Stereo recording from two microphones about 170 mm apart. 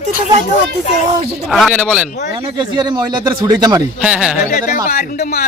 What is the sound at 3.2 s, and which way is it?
Speech, 25° right (ahead or behind).